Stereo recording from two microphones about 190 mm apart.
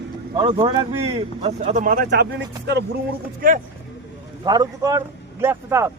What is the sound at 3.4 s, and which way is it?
Speech, 45° right (ahead or behind).